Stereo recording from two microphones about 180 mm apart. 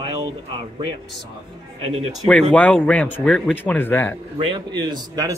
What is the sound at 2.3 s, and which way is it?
Speech, 5° left (ahead or behind).